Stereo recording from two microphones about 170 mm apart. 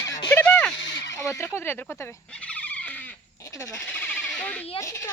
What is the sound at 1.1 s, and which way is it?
Speech, 15° left (ahead or behind).